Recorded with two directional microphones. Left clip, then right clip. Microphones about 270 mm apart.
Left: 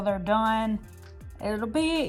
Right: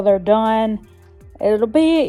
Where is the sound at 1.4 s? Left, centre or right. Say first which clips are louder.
Right 14 dB; right.